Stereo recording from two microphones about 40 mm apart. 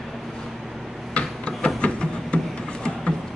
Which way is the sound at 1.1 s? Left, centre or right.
Left.